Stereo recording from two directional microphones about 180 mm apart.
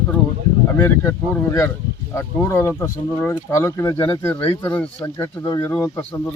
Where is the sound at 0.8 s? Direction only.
10° left (ahead or behind).